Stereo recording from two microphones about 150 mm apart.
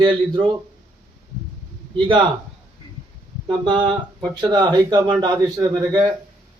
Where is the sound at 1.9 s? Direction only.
35° right (ahead or behind).